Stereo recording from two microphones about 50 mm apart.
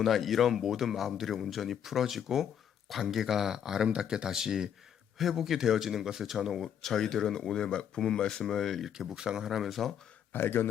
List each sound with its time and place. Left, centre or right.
0.0 s speech: centre
6.8 s speech: centre
8.4 s speech: centre
9.0 s speech: centre
10.3 s a man's voice: left